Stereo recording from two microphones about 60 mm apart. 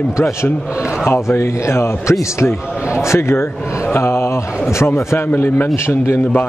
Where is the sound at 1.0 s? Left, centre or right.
Left.